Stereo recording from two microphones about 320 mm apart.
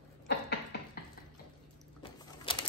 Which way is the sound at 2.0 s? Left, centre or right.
Centre.